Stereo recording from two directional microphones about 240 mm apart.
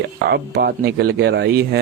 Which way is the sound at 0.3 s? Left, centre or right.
Right.